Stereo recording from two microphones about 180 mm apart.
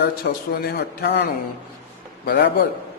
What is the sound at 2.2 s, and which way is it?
Speech, 60° left (ahead or behind).